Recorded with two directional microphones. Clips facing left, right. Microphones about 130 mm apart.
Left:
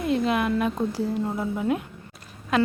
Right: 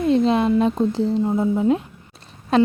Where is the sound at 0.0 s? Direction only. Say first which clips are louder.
Right 6 dB; 30° right (ahead or behind).